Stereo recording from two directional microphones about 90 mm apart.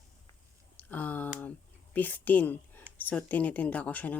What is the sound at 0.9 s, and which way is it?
Speech, 20° left (ahead or behind).